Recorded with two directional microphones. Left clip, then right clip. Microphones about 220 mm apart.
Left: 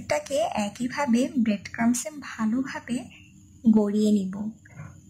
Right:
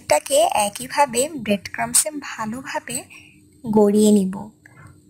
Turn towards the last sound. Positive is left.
turn(degrees=-25)  # may be behind; listen again after turning